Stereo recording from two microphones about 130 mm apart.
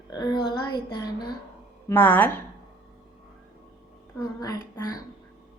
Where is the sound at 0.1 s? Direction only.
30° left (ahead or behind).